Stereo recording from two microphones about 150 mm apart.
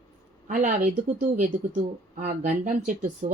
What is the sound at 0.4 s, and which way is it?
Speech, 60° right (ahead or behind).